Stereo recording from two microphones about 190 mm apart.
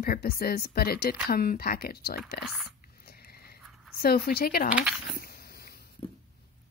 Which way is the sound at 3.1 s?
55° left (ahead or behind).